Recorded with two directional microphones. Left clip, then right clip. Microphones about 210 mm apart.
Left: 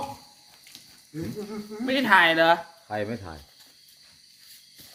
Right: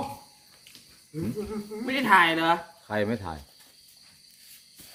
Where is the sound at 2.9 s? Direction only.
55° right (ahead or behind).